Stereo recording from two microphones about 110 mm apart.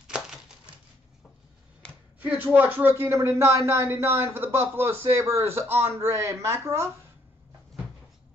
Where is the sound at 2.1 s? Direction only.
15° right (ahead or behind).